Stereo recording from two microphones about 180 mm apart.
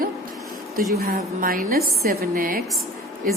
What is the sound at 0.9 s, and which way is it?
A woman's voice, 55° right (ahead or behind).